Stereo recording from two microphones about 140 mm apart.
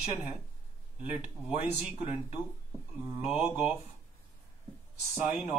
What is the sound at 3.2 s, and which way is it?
Speech, 10° right (ahead or behind).